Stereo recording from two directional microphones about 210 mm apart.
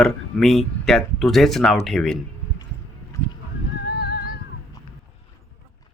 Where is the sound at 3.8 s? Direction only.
50° left (ahead or behind).